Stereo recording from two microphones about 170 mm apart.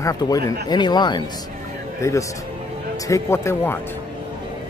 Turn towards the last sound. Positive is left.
turn(degrees=15)  # may be behind; listen again after turning